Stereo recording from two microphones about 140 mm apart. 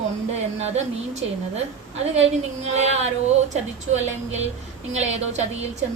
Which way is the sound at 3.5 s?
55° right (ahead or behind).